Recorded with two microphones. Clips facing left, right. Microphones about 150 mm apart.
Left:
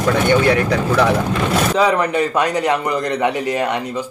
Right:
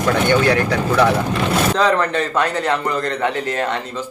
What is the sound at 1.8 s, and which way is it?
Speech, 10° left (ahead or behind).